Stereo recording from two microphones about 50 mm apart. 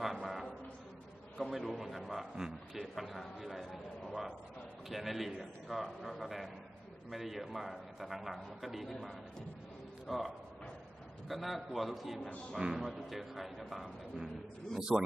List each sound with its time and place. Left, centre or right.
0.2 s a sound: centre
1.5 s a man's voice: centre
4.8 s a man's voice: centre
10.0 s a man's voice: centre
12.5 s speech: centre
12.8 s a man's voice: centre
14.8 s speech: centre